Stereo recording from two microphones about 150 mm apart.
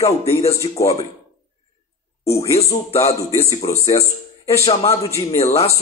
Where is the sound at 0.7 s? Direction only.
45° left (ahead or behind).